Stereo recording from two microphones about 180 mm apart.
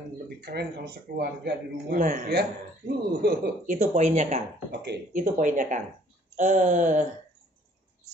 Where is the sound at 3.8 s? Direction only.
40° right (ahead or behind).